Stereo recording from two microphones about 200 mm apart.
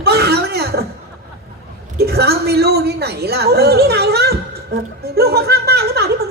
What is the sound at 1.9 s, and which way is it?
A woman's voice, 55° right (ahead or behind).